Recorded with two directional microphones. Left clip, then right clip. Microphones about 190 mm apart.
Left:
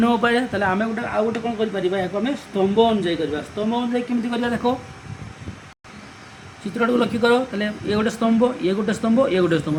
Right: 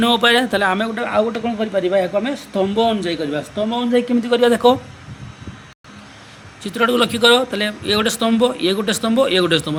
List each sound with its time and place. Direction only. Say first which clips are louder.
0.0 s speech: right 5 dB; 60° right (ahead or behind)
6.7 s speech: right 4 dB; 60° right (ahead or behind)